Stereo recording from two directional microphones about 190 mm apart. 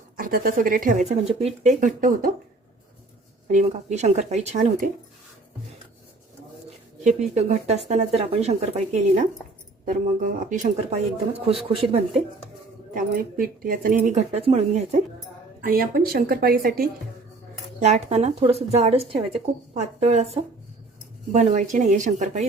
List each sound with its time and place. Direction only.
0.2 s speech: 50° right (ahead or behind)
3.5 s speech: 40° right (ahead or behind)
7.2 s speech: 35° right (ahead or behind)
9.8 s speech: 45° right (ahead or behind); by 12.2 s 30° right (ahead or behind)
12.9 s speech: 50° right (ahead or behind)
15.6 s speech: 50° right (ahead or behind)
17.7 s speech: 35° right (ahead or behind)